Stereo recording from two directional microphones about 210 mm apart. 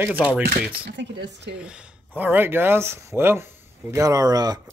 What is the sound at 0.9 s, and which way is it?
Speech, 55° right (ahead or behind).